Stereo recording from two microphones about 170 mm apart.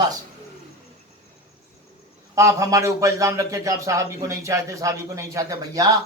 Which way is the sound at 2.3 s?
20° right (ahead or behind).